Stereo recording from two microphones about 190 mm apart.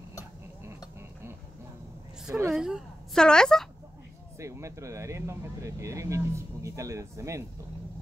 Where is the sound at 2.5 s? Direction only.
5° right (ahead or behind).